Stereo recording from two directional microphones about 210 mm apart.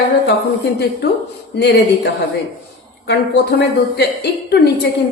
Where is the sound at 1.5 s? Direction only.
55° left (ahead or behind).